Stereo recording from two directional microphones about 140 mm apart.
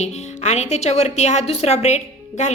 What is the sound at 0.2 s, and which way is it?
Speech, 55° left (ahead or behind).